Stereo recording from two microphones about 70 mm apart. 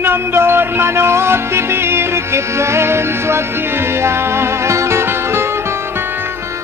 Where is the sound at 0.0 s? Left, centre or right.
Right.